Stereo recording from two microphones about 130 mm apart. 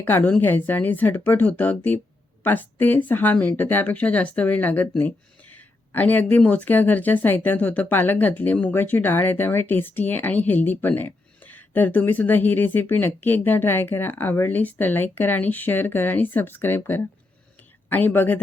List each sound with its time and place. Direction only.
0.0 s speech: 15° left (ahead or behind)